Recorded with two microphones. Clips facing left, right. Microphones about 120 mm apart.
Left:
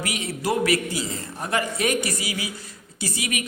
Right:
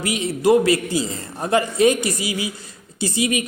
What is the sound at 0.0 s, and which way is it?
A man's voice, 25° right (ahead or behind).